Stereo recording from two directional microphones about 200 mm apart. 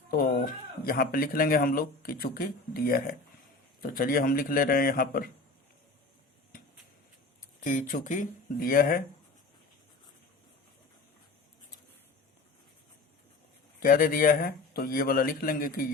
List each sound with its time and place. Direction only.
0.1 s speech: 45° left (ahead or behind)
7.6 s speech: 40° left (ahead or behind)
13.7 s speech: 45° left (ahead or behind)